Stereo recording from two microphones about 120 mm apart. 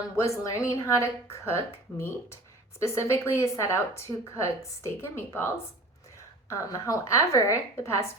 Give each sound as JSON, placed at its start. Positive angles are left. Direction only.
{"t": 0.2, "sound": "speech", "side_deg": 25}